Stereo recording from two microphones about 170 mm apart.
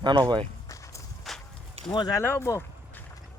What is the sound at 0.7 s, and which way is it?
Walk, 20° left (ahead or behind).